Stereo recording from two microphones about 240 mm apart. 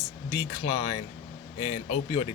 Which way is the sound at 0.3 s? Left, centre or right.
Left.